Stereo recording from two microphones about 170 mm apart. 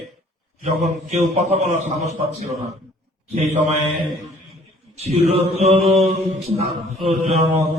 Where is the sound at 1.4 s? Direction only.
40° right (ahead or behind).